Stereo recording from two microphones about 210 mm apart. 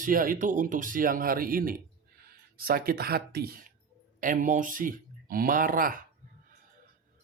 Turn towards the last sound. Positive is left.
turn(degrees=-40)  # may be behind; listen again after turning